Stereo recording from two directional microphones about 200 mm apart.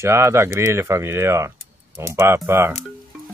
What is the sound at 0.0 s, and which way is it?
Speech, 15° right (ahead or behind).